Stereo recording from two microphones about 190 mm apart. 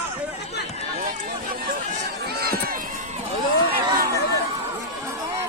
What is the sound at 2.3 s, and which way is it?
Run, 55° right (ahead or behind).